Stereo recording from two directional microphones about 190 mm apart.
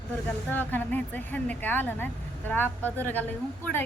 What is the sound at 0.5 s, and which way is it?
A woman's voice, 10° left (ahead or behind).